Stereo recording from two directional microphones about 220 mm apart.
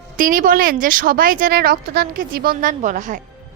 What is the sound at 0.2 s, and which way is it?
A woman's voice, 40° right (ahead or behind).